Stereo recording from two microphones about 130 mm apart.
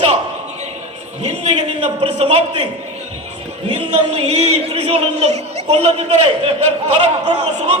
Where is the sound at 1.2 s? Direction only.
60° right (ahead or behind).